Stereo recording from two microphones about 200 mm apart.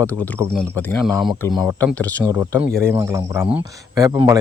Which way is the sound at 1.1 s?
Centre (ahead or behind).